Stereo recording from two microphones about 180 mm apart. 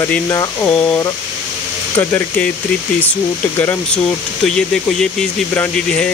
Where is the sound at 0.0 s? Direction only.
15° left (ahead or behind).